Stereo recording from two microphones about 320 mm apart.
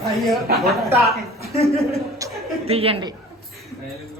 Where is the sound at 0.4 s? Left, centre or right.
Right.